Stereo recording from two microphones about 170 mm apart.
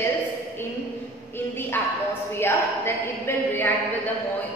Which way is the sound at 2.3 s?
15° left (ahead or behind).